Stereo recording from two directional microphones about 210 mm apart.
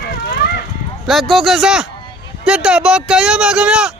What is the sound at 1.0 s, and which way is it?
Speech, centre (ahead or behind).